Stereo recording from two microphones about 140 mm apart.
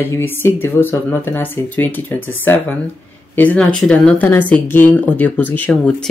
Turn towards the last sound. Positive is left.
turn(degrees=15)  # may be behind; listen again after turning